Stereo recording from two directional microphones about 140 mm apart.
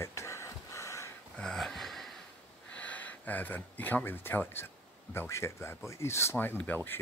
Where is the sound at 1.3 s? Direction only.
5° left (ahead or behind).